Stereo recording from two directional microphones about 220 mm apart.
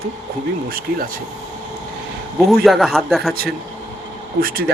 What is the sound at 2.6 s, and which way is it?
Speech, centre (ahead or behind).